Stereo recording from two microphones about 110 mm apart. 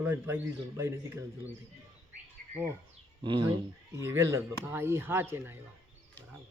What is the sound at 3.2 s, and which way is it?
Speech, 50° right (ahead or behind).